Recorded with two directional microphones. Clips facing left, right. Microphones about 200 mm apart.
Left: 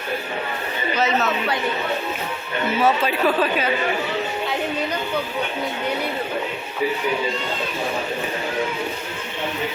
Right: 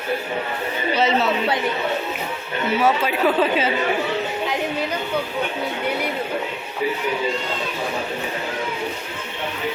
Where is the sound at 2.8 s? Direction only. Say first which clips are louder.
Even; 15° right (ahead or behind).